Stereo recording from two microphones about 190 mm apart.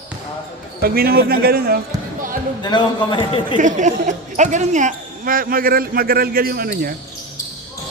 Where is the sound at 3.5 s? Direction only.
40° right (ahead or behind).